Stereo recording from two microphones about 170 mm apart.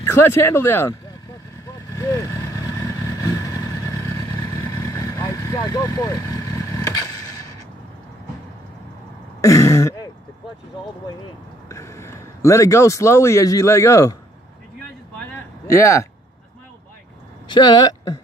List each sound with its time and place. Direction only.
0.0 s speech: 15° left (ahead or behind)
2.0 s vehicle: 15° left (ahead or behind)
4.8 s vehicle: 20° left (ahead or behind)
9.4 s throat clearing: 20° left (ahead or behind)
11.7 s speech: 15° left (ahead or behind)
15.6 s speech: 15° left (ahead or behind)
17.5 s speech: 25° left (ahead or behind)